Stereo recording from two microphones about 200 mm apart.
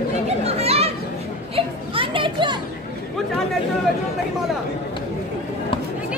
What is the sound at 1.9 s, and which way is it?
Speech, 25° right (ahead or behind).